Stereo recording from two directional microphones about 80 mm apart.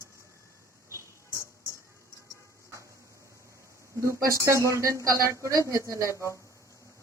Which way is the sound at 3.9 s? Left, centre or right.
Right.